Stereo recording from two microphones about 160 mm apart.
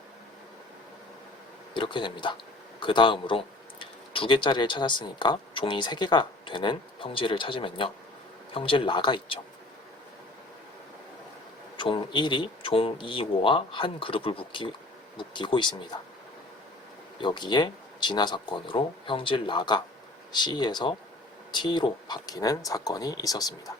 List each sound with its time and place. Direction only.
1.7 s speech: 30° left (ahead or behind)
11.8 s speech: 30° left (ahead or behind)
17.2 s speech: 30° left (ahead or behind)